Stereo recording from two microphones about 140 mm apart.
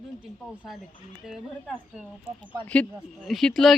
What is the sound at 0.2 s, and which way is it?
Speech, 5° right (ahead or behind).